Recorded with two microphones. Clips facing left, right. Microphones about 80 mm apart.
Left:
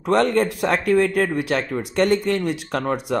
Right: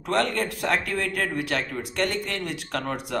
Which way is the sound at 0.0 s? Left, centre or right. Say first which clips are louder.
Left 7 dB; left.